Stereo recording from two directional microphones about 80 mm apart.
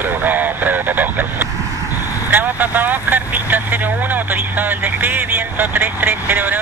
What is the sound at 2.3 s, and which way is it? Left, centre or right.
Vehicle, right.